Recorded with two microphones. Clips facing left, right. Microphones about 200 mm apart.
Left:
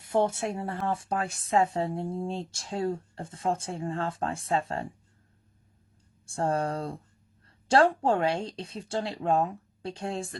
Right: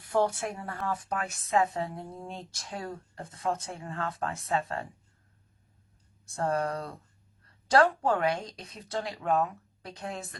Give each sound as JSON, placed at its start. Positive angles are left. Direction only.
{"t": 0.0, "sound": "speech", "side_deg": 25}
{"t": 6.2, "sound": "speech", "side_deg": 30}